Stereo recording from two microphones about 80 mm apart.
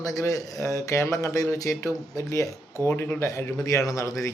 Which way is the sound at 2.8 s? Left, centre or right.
Left.